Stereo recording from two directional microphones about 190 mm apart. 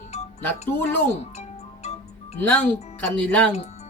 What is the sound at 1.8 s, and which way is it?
Music, 35° left (ahead or behind).